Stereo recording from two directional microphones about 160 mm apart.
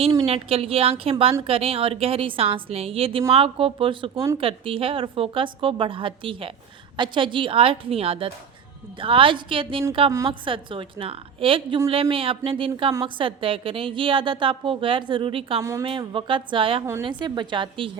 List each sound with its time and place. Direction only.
0.3 s a woman's voice: 35° right (ahead or behind)
4.1 s a woman's voice: 20° right (ahead or behind)
4.4 s a woman's voice: 35° right (ahead or behind)